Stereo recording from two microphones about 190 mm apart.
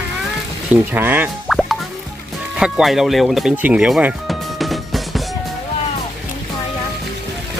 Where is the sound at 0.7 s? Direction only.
10° right (ahead or behind).